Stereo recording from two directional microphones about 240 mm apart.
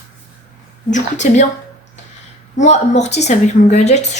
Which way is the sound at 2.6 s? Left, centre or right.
Left.